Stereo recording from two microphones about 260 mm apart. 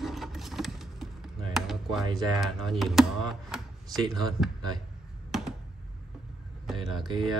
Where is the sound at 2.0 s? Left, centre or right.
Centre.